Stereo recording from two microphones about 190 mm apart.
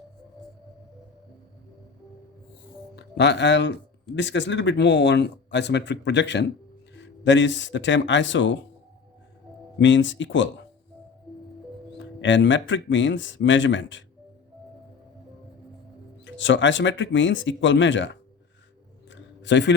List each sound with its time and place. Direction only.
2.9 s speech: 65° left (ahead or behind)
9.7 s speech: 75° left (ahead or behind)
11.9 s speech: 70° left (ahead or behind)
16.2 s speech: 75° left (ahead or behind)
19.1 s a sound: 70° left (ahead or behind)